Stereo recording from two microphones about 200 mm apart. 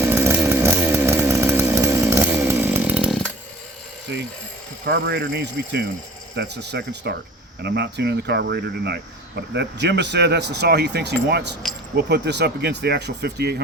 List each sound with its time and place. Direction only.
0.0 s chainsaw: 10° right (ahead or behind)
4.9 s speech: 55° right (ahead or behind)